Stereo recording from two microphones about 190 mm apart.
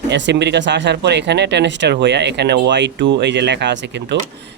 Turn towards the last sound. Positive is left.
turn(degrees=-65)  # may be behind; listen again after turning